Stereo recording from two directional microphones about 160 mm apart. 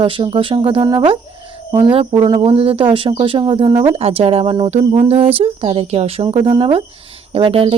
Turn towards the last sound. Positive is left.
turn(degrees=-35)  # may be behind; listen again after turning